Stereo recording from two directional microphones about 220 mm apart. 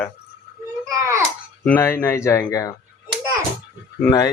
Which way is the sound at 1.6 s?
10° left (ahead or behind).